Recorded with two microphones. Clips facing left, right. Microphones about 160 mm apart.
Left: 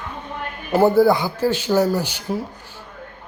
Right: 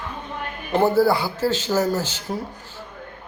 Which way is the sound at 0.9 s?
15° left (ahead or behind).